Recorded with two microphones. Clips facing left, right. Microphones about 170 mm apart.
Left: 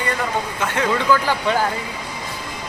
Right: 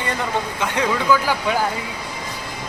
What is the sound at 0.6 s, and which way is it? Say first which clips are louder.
Speech: left 1 dB; 15° right (ahead or behind).